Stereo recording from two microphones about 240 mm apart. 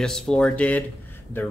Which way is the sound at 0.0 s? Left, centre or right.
Centre.